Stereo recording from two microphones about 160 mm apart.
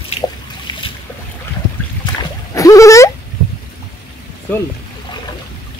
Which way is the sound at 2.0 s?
25° left (ahead or behind).